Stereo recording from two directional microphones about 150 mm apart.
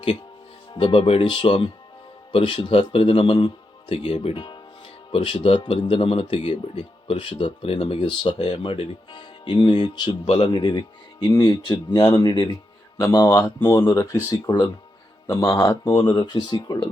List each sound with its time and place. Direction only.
0.7 s speech: 35° left (ahead or behind)
10.5 s speech: 30° left (ahead or behind)